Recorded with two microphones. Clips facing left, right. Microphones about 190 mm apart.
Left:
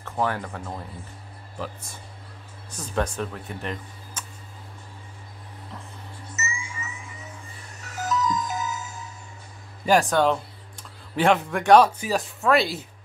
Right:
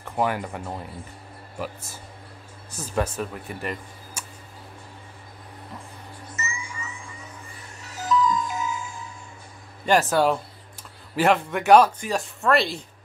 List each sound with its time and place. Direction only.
0.0 s speech: 15° right (ahead or behind)
2.7 s speech: 5° right (ahead or behind)
6.3 s music: 25° left (ahead or behind)
7.9 s music: 45° left (ahead or behind)
9.8 s speech: 5° right (ahead or behind)